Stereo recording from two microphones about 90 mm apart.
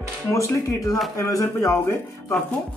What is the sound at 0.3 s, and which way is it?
A man's voice, 35° left (ahead or behind).